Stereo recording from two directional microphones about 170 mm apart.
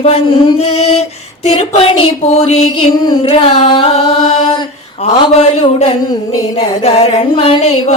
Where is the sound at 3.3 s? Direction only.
35° left (ahead or behind).